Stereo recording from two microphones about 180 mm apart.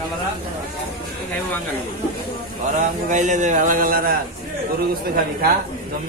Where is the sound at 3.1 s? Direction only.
40° right (ahead or behind).